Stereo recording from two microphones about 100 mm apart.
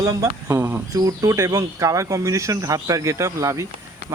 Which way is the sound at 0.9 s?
35° right (ahead or behind).